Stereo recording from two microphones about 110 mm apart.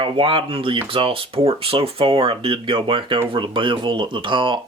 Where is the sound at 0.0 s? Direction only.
50° right (ahead or behind).